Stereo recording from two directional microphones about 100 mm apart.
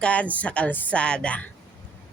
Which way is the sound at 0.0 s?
15° left (ahead or behind).